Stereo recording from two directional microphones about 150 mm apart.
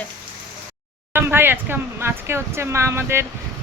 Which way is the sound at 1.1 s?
15° right (ahead or behind).